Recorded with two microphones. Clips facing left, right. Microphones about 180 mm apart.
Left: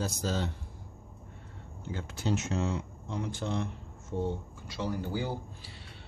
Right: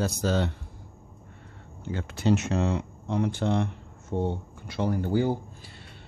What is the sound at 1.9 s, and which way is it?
Speech, 70° right (ahead or behind).